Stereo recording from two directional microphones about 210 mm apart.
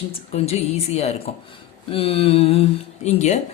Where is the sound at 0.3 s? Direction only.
30° left (ahead or behind).